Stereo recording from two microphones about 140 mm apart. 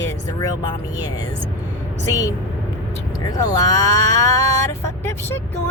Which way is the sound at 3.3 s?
25° left (ahead or behind).